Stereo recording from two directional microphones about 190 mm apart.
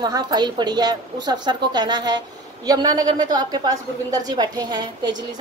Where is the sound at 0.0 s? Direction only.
20° right (ahead or behind).